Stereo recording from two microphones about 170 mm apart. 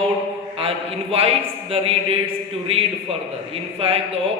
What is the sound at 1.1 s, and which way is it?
A man's voice, 35° right (ahead or behind).